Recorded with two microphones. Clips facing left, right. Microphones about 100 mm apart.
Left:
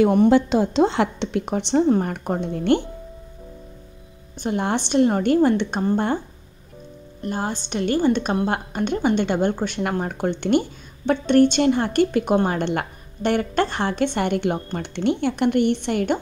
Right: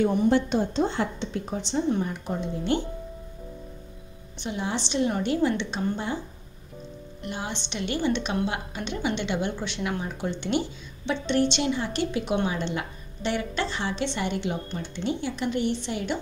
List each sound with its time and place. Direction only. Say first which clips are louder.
0.0 s a woman's voice: left 6 dB; 75° left (ahead or behind)
1.9 s a woman's voice: left 7 dB; 55° left (ahead or behind)
4.4 s a woman's voice: left 7 dB; 55° left (ahead or behind)
7.2 s a woman's voice: left 7 dB; 45° left (ahead or behind)